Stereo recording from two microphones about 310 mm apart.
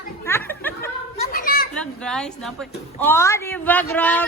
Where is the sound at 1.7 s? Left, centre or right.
Centre.